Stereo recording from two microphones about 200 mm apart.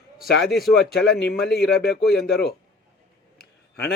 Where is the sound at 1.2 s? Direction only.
55° left (ahead or behind).